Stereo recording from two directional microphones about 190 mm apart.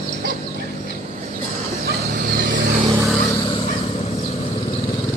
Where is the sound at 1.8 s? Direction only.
55° right (ahead or behind).